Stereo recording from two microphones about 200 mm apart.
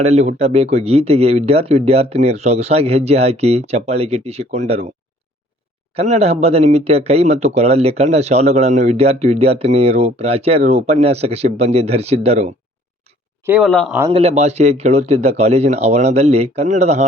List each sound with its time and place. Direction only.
0.0 s speech: 35° right (ahead or behind)
5.9 s speech: 30° right (ahead or behind)
13.4 s speech: 5° right (ahead or behind)
13.7 s a man's voice: 5° left (ahead or behind)
14.1 s speech: 30° right (ahead or behind)